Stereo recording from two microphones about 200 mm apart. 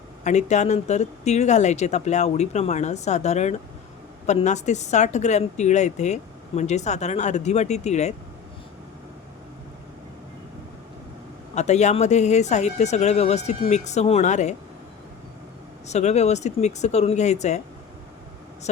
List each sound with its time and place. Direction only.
0.3 s speech: 35° left (ahead or behind)
11.5 s speech: 35° left (ahead or behind)
15.9 s speech: 35° left (ahead or behind)